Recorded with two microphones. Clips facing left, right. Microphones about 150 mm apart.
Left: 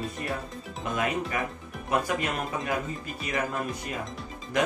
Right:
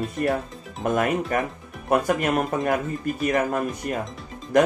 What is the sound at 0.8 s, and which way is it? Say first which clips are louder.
Speech: right 7 dB; 50° right (ahead or behind).